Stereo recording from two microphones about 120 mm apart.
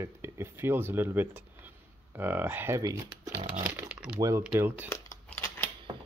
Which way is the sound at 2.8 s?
30° right (ahead or behind).